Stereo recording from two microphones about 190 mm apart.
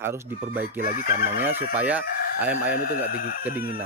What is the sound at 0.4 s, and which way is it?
Speech, 45° right (ahead or behind).